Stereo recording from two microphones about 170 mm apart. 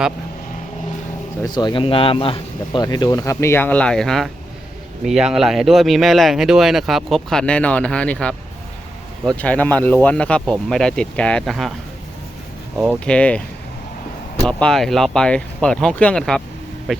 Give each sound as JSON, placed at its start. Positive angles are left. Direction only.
{"t": 1.5, "sound": "speech", "side_deg": 25}
{"t": 12.7, "sound": "speech", "side_deg": -5}
{"t": 13.1, "sound": "speech", "side_deg": 5}
{"t": 14.4, "sound": "speech", "side_deg": 0}